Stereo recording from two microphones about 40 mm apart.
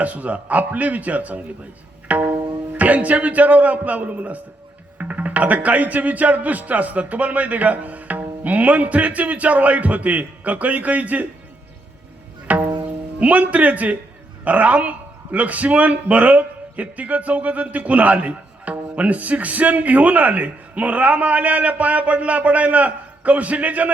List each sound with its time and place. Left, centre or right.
0.0 s a man's voice: right
2.1 s pizzicato: right
2.7 s a man's voice: right
12.5 s music: right
13.1 s a man's voice: right